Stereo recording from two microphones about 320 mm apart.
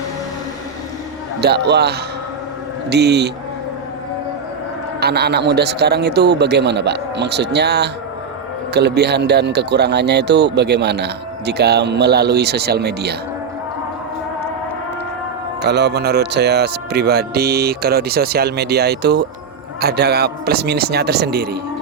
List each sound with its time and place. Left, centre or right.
1.4 s speech: right
4.9 s speech: right
15.6 s speech: right